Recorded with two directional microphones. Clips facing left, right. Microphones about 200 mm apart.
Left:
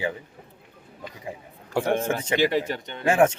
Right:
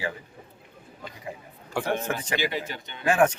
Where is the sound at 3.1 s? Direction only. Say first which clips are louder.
Left 2 dB; 25° left (ahead or behind).